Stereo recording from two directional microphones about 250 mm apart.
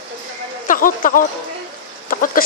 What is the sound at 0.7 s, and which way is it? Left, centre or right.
Speech, left.